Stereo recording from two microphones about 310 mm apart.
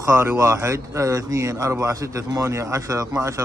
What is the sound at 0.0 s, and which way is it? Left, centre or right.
Speech, centre.